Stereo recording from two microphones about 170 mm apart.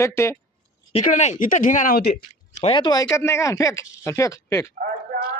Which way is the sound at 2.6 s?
30° left (ahead or behind).